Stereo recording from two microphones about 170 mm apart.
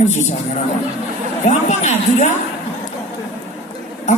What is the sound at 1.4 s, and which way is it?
Speech, 40° left (ahead or behind).